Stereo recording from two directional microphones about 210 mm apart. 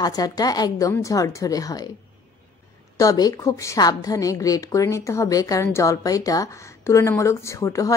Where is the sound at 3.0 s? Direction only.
15° left (ahead or behind).